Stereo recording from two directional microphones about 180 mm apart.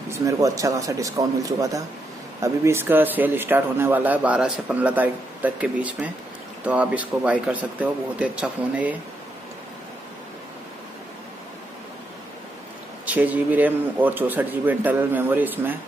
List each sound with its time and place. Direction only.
0.1 s a man's voice: 20° right (ahead or behind)
13.0 s a man's voice: 10° right (ahead or behind)